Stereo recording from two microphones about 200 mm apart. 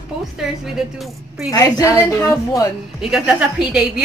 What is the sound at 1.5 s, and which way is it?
A woman's voice, 15° left (ahead or behind).